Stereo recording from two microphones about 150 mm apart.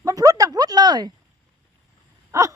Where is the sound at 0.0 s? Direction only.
25° right (ahead or behind).